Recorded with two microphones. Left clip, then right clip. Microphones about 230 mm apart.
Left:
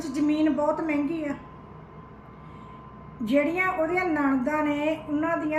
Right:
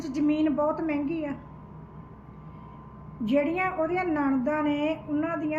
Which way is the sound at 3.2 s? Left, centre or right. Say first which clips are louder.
Left 2 dB; centre.